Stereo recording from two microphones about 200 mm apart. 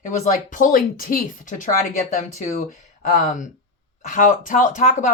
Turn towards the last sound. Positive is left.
turn(degrees=40)  # may be behind; listen again after turning